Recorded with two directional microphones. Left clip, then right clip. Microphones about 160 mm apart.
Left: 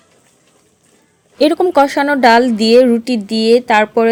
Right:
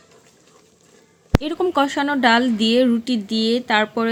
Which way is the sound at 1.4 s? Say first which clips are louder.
Left 11 dB; 40° left (ahead or behind).